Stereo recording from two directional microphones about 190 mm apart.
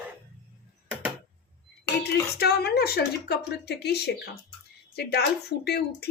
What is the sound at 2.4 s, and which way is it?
Speech, 55° left (ahead or behind).